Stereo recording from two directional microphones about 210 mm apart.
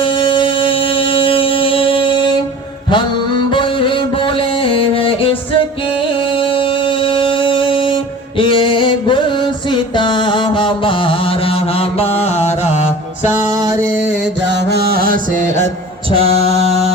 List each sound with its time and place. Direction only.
0.0 s music: 25° left (ahead or behind)
2.9 s mantra: 20° left (ahead or behind)
13.5 s music: 15° right (ahead or behind)
14.5 s mantra: 50° right (ahead or behind); by 16.9 s 30° right (ahead or behind)